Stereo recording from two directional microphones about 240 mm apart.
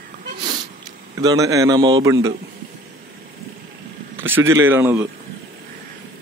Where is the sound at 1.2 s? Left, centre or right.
Centre.